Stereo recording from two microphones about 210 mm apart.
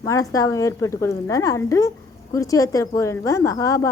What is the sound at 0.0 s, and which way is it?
A woman's voice, 15° left (ahead or behind).